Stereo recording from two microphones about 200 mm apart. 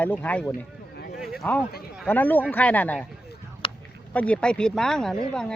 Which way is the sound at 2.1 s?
10° left (ahead or behind).